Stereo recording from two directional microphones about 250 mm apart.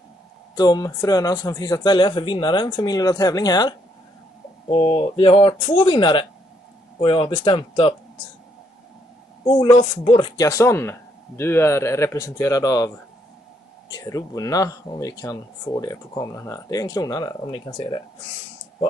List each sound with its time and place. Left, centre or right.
0.6 s speech: centre
9.5 s speech: centre